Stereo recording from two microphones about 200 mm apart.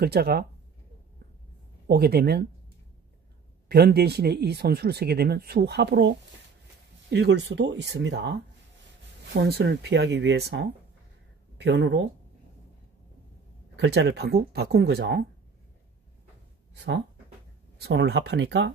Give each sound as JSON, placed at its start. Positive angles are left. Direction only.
{"t": 0.0, "sound": "speech", "side_deg": -50}
{"t": 1.9, "sound": "speech", "side_deg": -50}
{"t": 3.6, "sound": "speech", "side_deg": -55}
{"t": 13.7, "sound": "speech", "side_deg": -60}
{"t": 17.7, "sound": "speech", "side_deg": -55}